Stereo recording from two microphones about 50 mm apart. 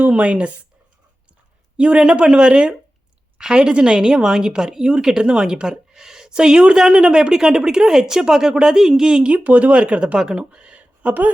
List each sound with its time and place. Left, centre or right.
0.0 s speech: right
1.7 s a woman's voice: right
9.2 s speech: right
10.2 s speech: centre